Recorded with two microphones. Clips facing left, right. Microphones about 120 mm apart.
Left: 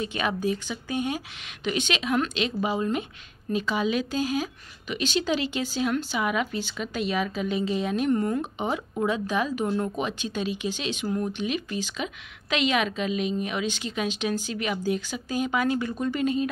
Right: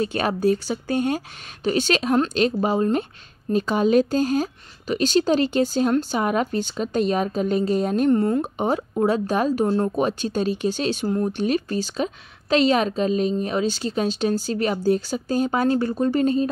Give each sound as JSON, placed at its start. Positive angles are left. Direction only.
{"t": 0.0, "sound": "speech", "side_deg": -40}
{"t": 8.5, "sound": "speech", "side_deg": -40}